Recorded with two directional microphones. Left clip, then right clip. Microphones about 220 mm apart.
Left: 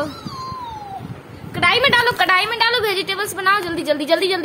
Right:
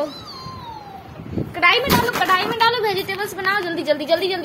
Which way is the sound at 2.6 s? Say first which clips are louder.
Even; 25° left (ahead or behind).